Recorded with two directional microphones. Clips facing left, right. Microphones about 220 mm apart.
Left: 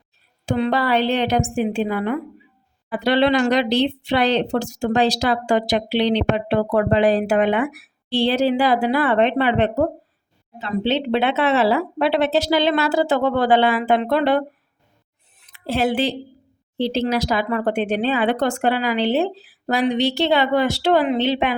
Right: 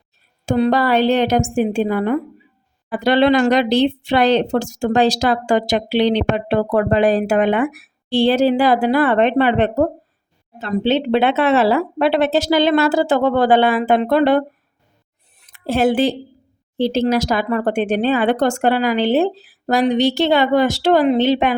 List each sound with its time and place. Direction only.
0.4 s speech: 40° right (ahead or behind)
15.5 s speech: 50° right (ahead or behind)